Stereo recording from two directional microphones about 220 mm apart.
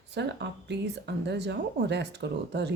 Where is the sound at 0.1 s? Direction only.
50° right (ahead or behind).